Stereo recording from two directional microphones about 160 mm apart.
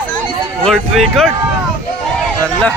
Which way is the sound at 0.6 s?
5° left (ahead or behind).